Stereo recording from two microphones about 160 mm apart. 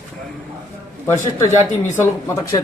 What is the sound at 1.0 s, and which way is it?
Speech, 15° left (ahead or behind).